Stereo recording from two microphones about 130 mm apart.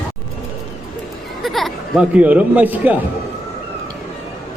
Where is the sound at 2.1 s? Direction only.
10° right (ahead or behind).